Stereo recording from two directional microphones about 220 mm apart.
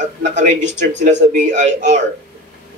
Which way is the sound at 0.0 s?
35° right (ahead or behind).